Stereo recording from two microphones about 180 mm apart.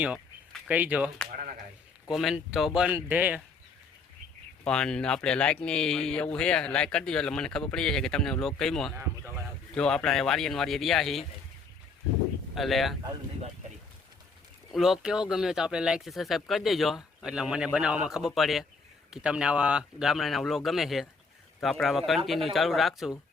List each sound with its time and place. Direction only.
0.0 s speech: 5° right (ahead or behind)
1.3 s speech: 50° right (ahead or behind)
2.0 s speech: 5° right (ahead or behind)
4.6 s speech: 5° left (ahead or behind)
12.5 s speech: centre (ahead or behind)
14.7 s speech: centre (ahead or behind)